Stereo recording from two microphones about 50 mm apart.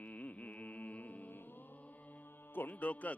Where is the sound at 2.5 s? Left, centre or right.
Left.